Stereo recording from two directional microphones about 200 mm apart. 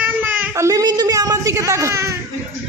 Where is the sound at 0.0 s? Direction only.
10° right (ahead or behind).